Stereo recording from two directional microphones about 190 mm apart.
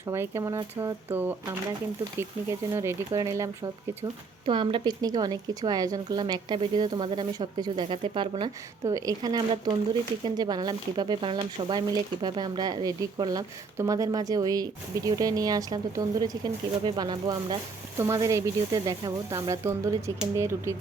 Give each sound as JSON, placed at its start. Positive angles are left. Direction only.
{"t": 0.1, "sound": "speech", "side_deg": -15}